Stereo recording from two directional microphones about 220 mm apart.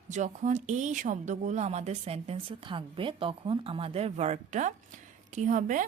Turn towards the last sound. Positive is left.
turn(degrees=-35)  # may be behind; listen again after turning